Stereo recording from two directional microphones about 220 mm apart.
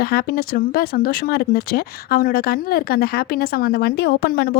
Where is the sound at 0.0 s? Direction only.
45° left (ahead or behind).